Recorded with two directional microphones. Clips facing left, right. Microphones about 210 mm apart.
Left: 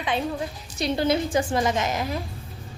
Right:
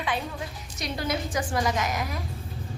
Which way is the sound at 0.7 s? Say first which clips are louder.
Left 7 dB; 30° left (ahead or behind).